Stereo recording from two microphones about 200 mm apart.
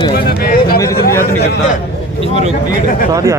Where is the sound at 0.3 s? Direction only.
50° left (ahead or behind).